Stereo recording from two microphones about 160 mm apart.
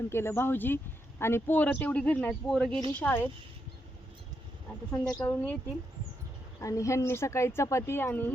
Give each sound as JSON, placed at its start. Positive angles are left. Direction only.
{"t": 0.1, "sound": "a woman's voice", "side_deg": 15}
{"t": 5.1, "sound": "a woman's voice", "side_deg": 15}
{"t": 6.6, "sound": "a woman's voice", "side_deg": 20}